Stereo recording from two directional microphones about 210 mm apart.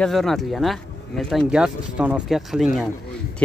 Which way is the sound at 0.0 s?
Centre (ahead or behind).